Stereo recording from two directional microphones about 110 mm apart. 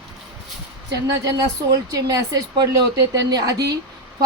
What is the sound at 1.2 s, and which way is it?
Speech, 35° right (ahead or behind).